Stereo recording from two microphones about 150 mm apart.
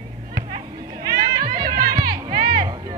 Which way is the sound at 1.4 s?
75° right (ahead or behind).